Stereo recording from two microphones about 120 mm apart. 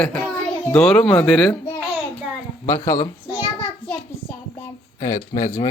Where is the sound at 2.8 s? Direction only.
30° left (ahead or behind).